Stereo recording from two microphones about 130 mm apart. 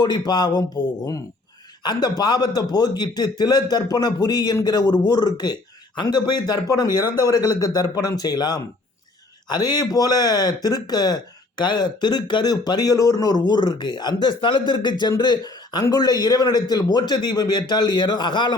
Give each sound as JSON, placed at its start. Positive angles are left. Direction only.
{"t": 0.0, "sound": "speech", "side_deg": 35}
{"t": 1.8, "sound": "a man's voice", "side_deg": 30}